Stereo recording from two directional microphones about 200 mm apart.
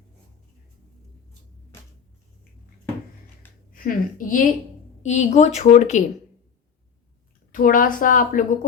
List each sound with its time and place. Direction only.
3.7 s a woman's voice: 45° left (ahead or behind)
7.5 s a woman's voice: 45° left (ahead or behind)